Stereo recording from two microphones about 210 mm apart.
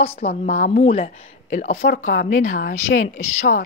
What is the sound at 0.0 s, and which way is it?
A woman's voice, 30° left (ahead or behind).